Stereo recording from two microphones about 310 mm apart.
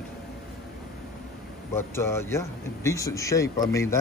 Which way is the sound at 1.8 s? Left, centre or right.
Centre.